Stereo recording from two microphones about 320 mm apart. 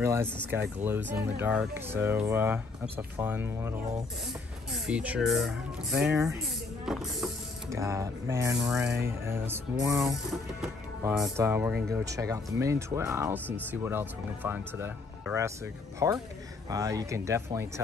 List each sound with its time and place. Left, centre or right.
0.0 s speech: centre
0.3 s speech: centre
1.0 s speech: right
1.4 s speech: centre